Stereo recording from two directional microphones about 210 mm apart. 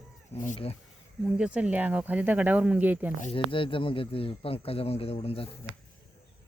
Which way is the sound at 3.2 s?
25° left (ahead or behind).